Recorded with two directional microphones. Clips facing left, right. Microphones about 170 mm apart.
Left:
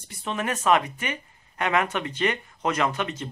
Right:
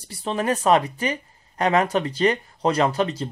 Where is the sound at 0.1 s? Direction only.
35° right (ahead or behind).